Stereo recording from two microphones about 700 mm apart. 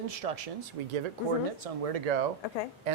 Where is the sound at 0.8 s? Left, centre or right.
Right.